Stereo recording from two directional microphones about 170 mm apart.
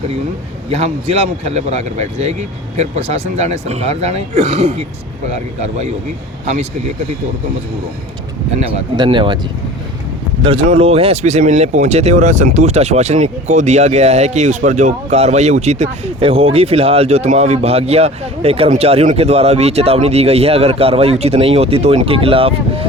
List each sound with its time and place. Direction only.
0.7 s speech: 40° right (ahead or behind)
6.4 s speech: 40° right (ahead or behind)
9.0 s speech: 30° right (ahead or behind)
10.4 s speech: 35° right (ahead or behind)